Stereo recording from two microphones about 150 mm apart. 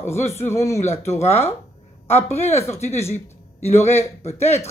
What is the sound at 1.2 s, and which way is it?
A man's voice, 45° left (ahead or behind).